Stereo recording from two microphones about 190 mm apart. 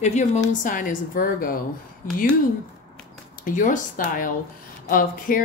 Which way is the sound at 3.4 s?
45° left (ahead or behind).